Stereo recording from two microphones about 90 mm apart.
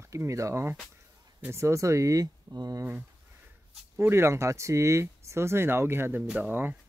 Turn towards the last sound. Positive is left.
turn(degrees=-20)  # may be behind; listen again after turning